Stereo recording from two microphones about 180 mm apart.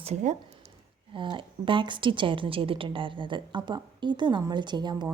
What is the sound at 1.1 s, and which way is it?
A woman's voice, 25° right (ahead or behind).